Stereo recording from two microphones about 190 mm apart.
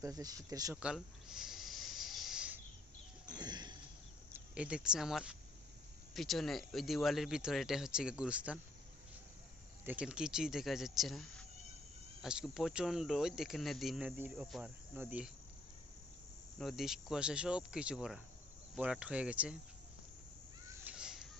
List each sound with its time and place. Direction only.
0.0 s speech: 20° right (ahead or behind)
0.8 s a sound: 5° right (ahead or behind)
3.3 s a sound: 20° right (ahead or behind)
4.3 s speech: 5° right (ahead or behind)
9.8 s speech: 5° right (ahead or behind)
14.9 s cricket: 10° right (ahead or behind)
16.6 s speech: centre (ahead or behind)
20.8 s children playing: 5° right (ahead or behind)